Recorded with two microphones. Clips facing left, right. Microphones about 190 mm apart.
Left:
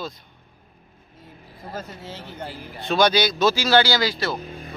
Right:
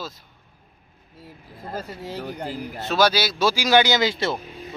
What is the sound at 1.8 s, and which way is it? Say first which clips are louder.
Speech: right 5 dB; 10° right (ahead or behind).